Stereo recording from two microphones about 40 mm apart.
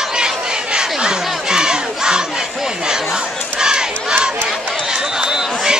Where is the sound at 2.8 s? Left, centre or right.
Centre.